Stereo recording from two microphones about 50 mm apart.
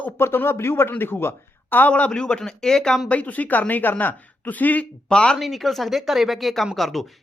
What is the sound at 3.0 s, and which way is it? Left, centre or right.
Speech, left.